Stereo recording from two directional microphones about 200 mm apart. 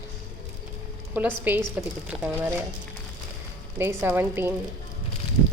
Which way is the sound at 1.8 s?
5° right (ahead or behind).